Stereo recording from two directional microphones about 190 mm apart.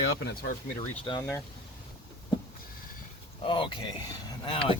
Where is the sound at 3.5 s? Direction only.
25° left (ahead or behind).